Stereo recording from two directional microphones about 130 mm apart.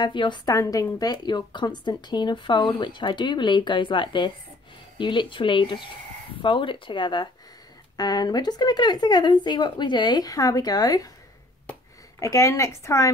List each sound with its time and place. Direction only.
0.0 s speech: 35° left (ahead or behind)
12.2 s a woman's voice: 25° left (ahead or behind)